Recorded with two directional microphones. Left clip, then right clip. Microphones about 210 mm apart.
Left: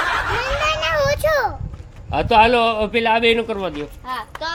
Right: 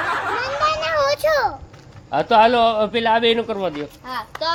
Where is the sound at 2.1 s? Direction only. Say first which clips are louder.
Even; centre (ahead or behind).